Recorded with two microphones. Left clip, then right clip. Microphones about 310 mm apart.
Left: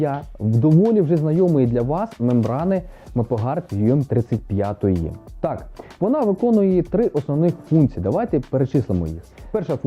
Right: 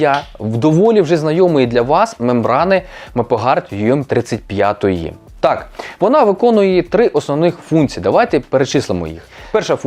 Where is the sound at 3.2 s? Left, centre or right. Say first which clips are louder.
Right 9 dB; centre.